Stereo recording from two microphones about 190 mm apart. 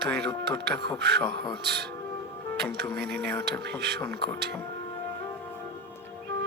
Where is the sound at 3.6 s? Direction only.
60° right (ahead or behind).